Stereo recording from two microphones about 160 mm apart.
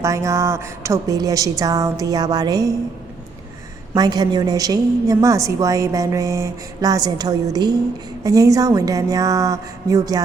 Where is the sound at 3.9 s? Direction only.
25° right (ahead or behind).